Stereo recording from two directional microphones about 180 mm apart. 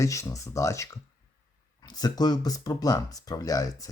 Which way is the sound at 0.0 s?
20° left (ahead or behind).